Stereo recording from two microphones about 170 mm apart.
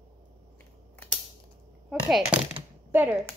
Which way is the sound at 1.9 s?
5° right (ahead or behind).